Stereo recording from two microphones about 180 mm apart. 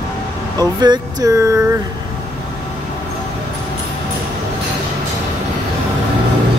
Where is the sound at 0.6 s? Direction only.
25° right (ahead or behind).